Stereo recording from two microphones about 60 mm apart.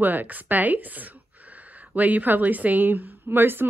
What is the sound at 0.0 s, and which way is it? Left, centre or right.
A woman's voice, right.